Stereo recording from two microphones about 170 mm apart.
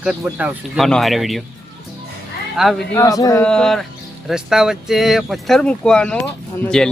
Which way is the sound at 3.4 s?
5° left (ahead or behind).